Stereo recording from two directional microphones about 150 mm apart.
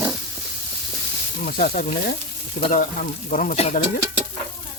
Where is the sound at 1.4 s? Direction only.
65° left (ahead or behind).